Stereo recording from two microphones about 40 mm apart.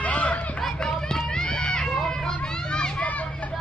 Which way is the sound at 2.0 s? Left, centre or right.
Centre.